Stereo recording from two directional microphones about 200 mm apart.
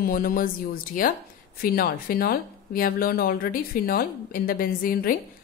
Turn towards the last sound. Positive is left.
turn(degrees=45)  # may be behind; listen again after turning